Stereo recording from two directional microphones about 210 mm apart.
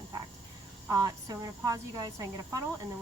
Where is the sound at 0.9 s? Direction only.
15° right (ahead or behind).